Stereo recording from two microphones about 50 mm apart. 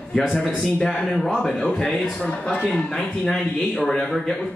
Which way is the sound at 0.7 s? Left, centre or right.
Centre.